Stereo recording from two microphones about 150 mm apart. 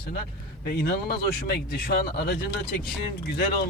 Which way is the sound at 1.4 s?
90° left.